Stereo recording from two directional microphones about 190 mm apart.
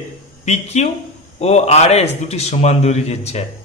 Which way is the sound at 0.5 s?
35° left (ahead or behind).